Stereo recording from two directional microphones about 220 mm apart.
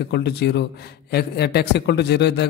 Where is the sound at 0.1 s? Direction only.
50° left (ahead or behind).